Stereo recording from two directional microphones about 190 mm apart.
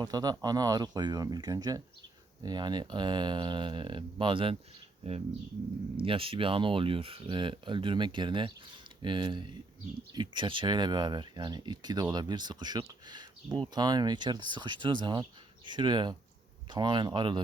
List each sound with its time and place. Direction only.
0.0 s speech: 20° right (ahead or behind)